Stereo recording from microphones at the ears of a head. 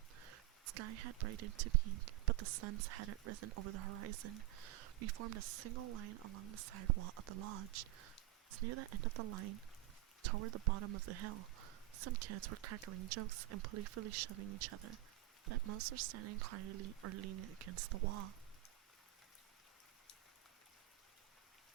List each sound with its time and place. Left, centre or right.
0.2 s speech: right